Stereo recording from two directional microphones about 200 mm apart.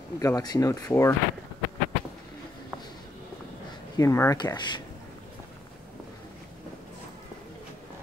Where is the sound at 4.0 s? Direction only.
15° left (ahead or behind).